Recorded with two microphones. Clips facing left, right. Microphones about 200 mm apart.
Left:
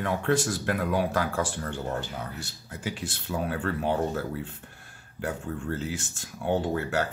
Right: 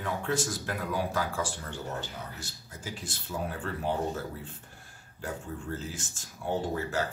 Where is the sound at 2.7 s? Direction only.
70° left (ahead or behind).